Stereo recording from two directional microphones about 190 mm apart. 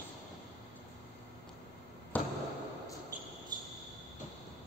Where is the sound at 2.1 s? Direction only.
10° left (ahead or behind).